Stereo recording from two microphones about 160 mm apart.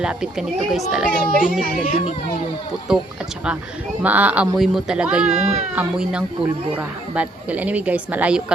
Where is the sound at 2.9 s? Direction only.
5° right (ahead or behind).